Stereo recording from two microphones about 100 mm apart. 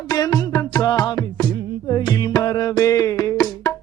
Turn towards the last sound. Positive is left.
turn(degrees=35)  # may be behind; listen again after turning